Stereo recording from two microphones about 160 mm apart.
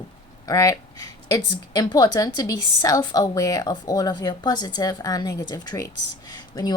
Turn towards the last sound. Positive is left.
turn(degrees=25)  # may be behind; listen again after turning